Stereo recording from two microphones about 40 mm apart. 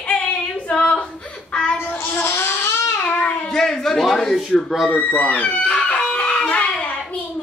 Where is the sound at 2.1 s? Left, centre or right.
Left.